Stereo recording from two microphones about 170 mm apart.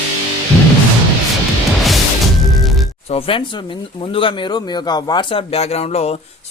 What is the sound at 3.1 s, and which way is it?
Speech, 35° left (ahead or behind).